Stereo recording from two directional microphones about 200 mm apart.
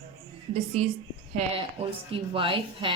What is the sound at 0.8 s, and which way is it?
A woman's voice, 35° right (ahead or behind).